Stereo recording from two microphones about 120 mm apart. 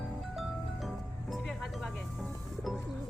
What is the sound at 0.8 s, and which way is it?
Music, centre (ahead or behind).